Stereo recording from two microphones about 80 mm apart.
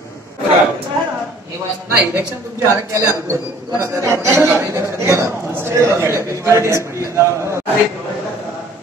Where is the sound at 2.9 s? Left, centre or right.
Right.